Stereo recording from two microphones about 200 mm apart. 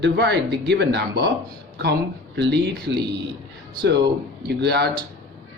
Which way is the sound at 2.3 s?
60° right (ahead or behind).